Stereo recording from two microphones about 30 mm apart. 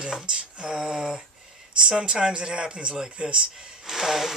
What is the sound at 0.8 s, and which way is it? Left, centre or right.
Speech, right.